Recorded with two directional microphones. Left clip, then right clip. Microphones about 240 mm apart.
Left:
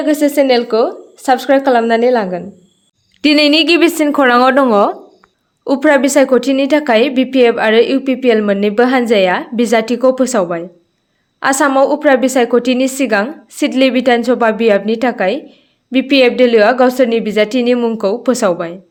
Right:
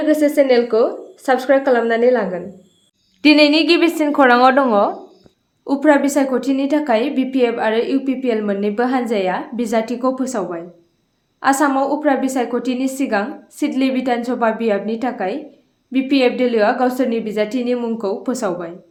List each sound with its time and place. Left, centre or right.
0.0 s a woman's voice: left